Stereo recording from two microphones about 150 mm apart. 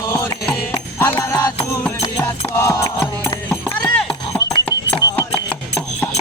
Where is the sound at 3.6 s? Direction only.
5° left (ahead or behind).